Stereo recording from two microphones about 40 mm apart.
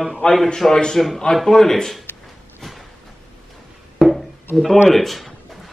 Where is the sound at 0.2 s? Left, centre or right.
Left.